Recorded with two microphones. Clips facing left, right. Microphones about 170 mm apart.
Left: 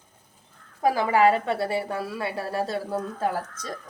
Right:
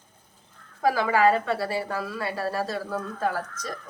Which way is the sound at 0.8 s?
20° left (ahead or behind).